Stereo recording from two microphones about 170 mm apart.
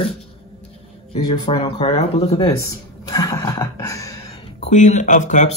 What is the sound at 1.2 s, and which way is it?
Speech, 30° left (ahead or behind).